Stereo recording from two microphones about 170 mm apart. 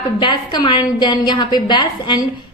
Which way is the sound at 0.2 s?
30° left (ahead or behind).